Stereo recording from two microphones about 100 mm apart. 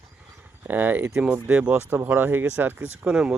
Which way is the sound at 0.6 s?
20° right (ahead or behind).